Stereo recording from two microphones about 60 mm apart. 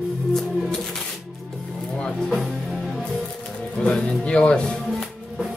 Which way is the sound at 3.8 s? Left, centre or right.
Centre.